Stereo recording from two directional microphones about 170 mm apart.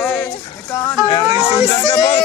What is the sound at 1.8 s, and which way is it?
Speech, 20° left (ahead or behind).